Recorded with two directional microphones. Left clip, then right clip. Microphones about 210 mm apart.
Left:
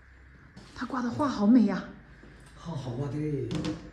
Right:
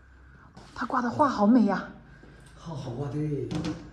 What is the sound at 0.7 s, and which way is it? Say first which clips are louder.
A woman's voice: right 6 dB; 10° left (ahead or behind).